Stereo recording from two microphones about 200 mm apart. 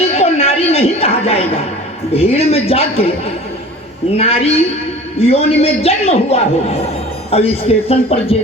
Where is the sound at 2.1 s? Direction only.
30° left (ahead or behind).